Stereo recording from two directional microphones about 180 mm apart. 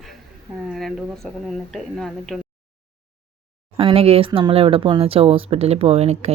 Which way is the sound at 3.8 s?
30° right (ahead or behind).